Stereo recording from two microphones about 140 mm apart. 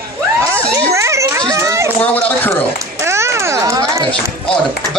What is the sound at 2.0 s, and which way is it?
Speech, 10° left (ahead or behind).